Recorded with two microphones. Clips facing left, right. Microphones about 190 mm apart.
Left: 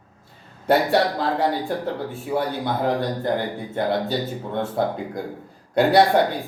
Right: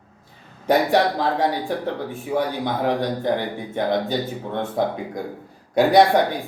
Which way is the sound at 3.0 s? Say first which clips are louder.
Right 1 dB; 15° right (ahead or behind).